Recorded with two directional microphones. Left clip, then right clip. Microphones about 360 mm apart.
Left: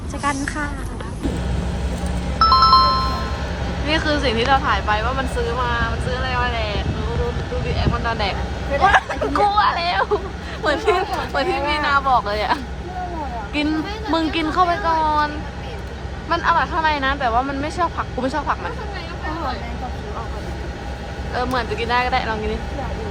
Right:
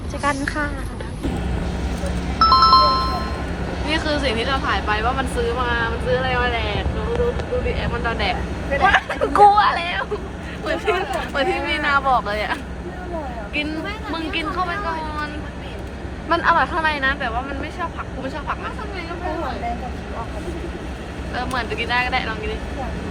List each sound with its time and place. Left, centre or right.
2.4 s music: centre
3.8 s speech: centre
7.8 s speech: centre
14.1 s speech: centre
16.3 s speech: centre
21.3 s speech: centre